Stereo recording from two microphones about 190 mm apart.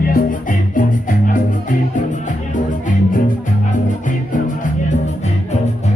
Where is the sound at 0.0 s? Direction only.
45° left (ahead or behind).